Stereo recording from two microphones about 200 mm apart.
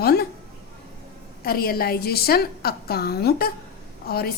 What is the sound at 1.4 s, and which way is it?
A woman's voice, 50° left (ahead or behind).